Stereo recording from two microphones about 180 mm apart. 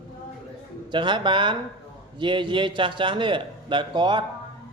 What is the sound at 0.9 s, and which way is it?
Speech, 25° right (ahead or behind).